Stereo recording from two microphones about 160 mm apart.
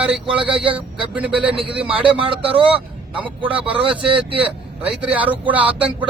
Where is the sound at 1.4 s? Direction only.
35° right (ahead or behind).